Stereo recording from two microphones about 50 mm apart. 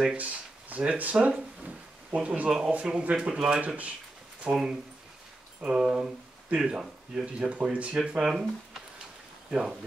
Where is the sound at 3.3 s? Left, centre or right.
Centre.